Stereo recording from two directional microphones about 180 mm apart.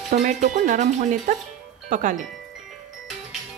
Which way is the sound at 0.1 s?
45° right (ahead or behind).